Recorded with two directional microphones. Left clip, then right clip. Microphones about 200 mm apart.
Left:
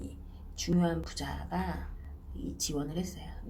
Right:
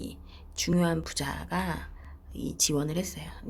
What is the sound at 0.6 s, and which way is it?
Speech, 35° right (ahead or behind).